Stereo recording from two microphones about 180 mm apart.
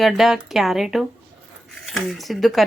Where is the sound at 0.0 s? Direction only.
Centre (ahead or behind).